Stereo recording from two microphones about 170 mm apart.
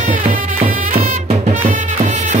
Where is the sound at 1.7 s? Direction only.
45° right (ahead or behind).